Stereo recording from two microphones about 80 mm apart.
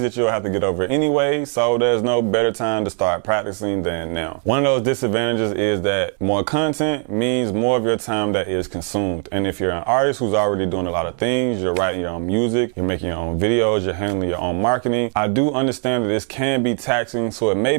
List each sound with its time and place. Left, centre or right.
0.0 s speech: centre